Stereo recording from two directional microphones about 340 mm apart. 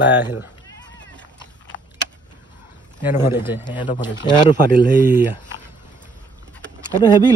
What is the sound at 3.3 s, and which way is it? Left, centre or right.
Speech, centre.